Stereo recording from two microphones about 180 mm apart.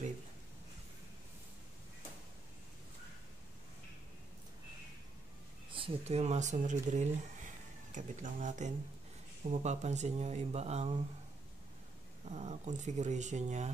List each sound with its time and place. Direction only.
5.7 s speech: 30° right (ahead or behind)
12.3 s speech: 40° right (ahead or behind)